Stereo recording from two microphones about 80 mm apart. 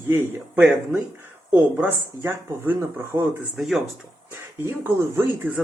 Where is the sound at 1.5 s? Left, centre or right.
Right.